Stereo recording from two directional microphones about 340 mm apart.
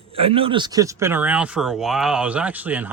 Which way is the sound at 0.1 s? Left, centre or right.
Centre.